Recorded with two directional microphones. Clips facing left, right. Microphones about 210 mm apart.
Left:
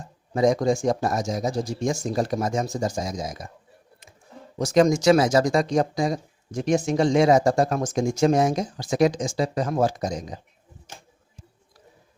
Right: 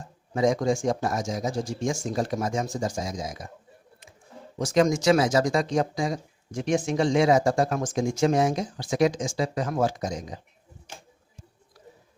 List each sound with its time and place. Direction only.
0.3 s speech: 40° left (ahead or behind)
4.5 s speech: 40° left (ahead or behind)